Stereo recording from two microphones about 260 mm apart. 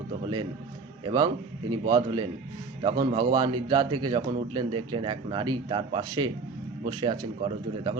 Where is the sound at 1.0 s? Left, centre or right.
Centre.